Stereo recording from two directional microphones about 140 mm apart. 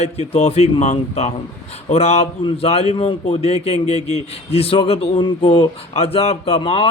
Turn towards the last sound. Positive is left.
turn(degrees=45)  # may be behind; listen again after turning